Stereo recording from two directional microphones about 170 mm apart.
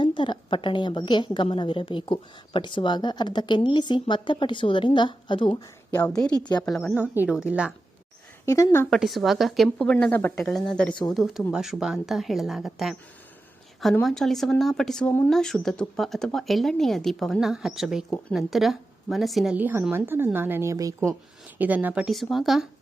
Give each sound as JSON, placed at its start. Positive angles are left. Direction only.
{"t": 0.0, "sound": "a woman's voice", "side_deg": 30}
{"t": 5.9, "sound": "a woman's voice", "side_deg": 10}
{"t": 6.4, "sound": "a woman's voice", "side_deg": 25}
{"t": 6.7, "sound": "speech", "side_deg": 0}
{"t": 8.4, "sound": "a woman's voice", "side_deg": 20}
{"t": 8.9, "sound": "speech", "side_deg": 0}
{"t": 14.0, "sound": "a woman's voice", "side_deg": 0}